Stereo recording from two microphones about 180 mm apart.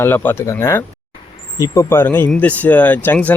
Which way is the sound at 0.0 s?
10° left (ahead or behind).